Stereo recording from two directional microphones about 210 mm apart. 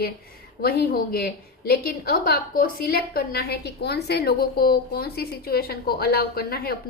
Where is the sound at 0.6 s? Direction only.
45° left (ahead or behind).